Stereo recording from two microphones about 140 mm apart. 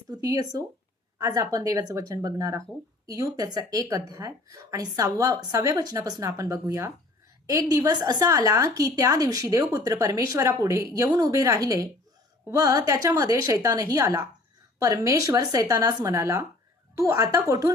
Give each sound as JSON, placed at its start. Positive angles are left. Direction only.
{"t": 0.1, "sound": "a woman's voice", "side_deg": -25}